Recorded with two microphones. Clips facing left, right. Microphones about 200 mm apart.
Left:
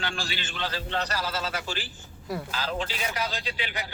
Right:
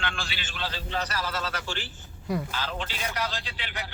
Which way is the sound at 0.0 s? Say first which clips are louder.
Left 1 dB; 35° left (ahead or behind).